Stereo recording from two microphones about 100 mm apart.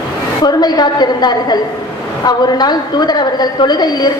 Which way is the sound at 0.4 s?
45° left (ahead or behind).